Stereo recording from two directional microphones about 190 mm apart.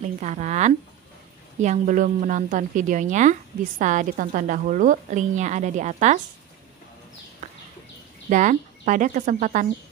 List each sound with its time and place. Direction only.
0.2 s a woman's voice: 40° right (ahead or behind)
8.3 s speech: 40° right (ahead or behind)